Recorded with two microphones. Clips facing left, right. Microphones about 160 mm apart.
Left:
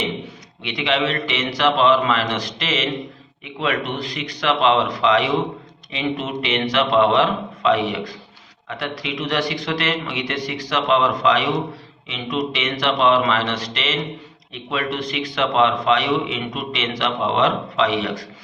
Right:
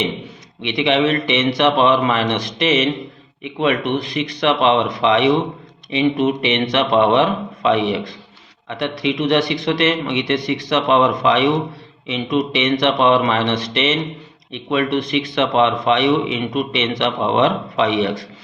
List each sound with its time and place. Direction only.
0.6 s a man's voice: 20° right (ahead or behind)
3.9 s a man's voice: 20° right (ahead or behind)